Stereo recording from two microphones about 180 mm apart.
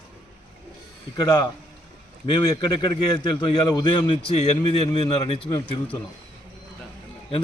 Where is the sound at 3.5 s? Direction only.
25° left (ahead or behind).